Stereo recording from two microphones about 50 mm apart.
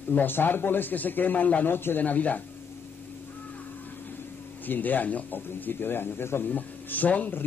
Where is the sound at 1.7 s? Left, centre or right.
Left.